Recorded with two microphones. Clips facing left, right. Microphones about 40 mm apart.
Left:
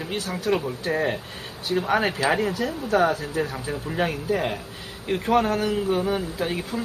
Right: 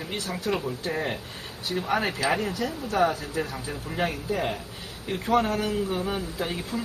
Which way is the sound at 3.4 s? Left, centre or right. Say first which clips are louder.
Left 4 dB; left.